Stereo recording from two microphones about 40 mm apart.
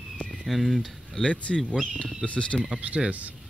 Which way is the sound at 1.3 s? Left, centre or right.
Left.